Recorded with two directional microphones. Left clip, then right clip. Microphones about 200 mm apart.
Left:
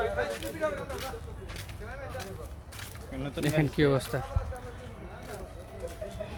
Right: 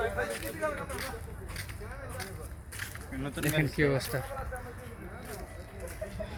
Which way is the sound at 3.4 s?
20° left (ahead or behind).